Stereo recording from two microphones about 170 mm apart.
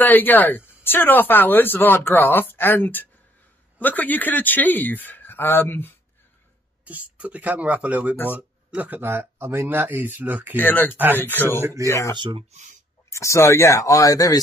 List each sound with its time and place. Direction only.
0.0 s speech: 10° left (ahead or behind)
6.8 s speech: 10° right (ahead or behind)
10.5 s speech: 10° left (ahead or behind)
10.9 s speech: 10° right (ahead or behind)
11.1 s speech: 10° left (ahead or behind)
11.6 s speech: 20° right (ahead or behind)
12.2 s speech: 30° right (ahead or behind)
13.1 s speech: 15° left (ahead or behind)